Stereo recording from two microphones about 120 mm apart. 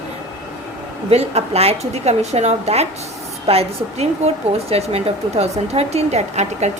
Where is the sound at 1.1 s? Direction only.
60° right (ahead or behind).